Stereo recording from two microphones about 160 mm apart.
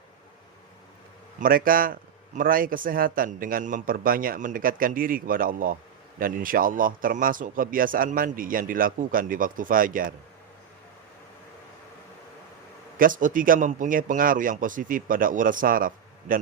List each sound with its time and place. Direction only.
1.4 s a man's voice: 60° right (ahead or behind)
13.0 s a man's voice: 55° right (ahead or behind)